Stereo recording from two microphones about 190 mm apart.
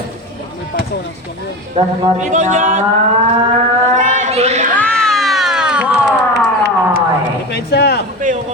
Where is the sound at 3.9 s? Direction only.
40° right (ahead or behind).